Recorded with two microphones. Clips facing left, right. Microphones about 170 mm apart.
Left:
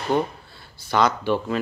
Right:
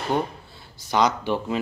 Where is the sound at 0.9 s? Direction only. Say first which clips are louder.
Left 1 dB; 15° right (ahead or behind).